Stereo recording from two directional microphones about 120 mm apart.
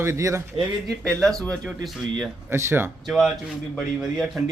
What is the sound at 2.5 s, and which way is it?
Speech, 20° right (ahead or behind).